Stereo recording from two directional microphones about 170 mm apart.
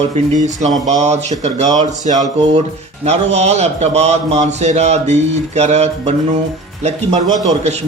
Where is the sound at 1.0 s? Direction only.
40° right (ahead or behind).